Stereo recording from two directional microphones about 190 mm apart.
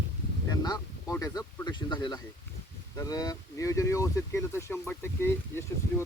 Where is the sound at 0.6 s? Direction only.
20° left (ahead or behind).